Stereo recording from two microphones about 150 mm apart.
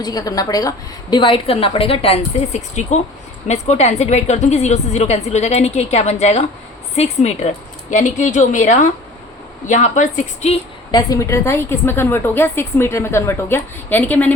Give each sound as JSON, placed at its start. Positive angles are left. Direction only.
{"t": 0.0, "sound": "a woman's voice", "side_deg": 25}
{"t": 10.9, "sound": "a woman's voice", "side_deg": 20}